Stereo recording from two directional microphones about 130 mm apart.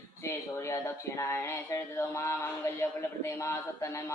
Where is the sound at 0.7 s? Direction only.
20° left (ahead or behind).